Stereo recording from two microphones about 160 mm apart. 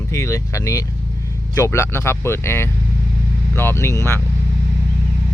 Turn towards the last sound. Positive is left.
turn(degrees=15)  # may be behind; listen again after turning